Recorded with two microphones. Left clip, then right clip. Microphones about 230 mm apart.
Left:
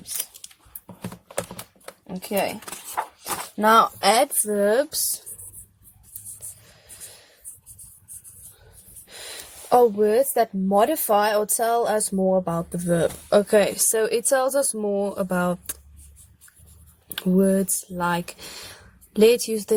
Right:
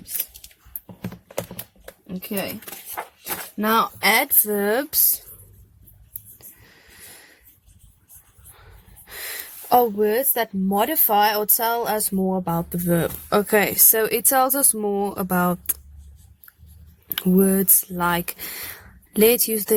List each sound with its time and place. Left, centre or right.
1.4 s typing: centre
2.0 s speech: right
3.6 s speech: right
6.7 s snort: right
9.0 s speech: right
17.2 s speech: right